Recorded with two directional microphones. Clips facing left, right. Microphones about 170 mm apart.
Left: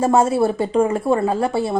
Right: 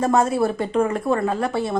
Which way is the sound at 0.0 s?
30° left (ahead or behind).